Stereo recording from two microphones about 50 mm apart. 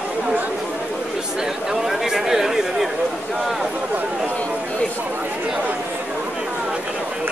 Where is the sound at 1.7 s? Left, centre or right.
Centre.